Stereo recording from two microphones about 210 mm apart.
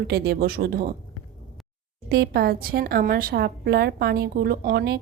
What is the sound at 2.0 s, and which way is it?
Speech, 50° right (ahead or behind).